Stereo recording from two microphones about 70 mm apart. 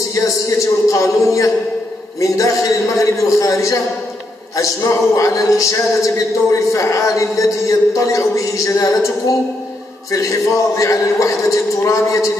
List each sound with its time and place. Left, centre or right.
0.1 s speech: left
10.1 s speech: left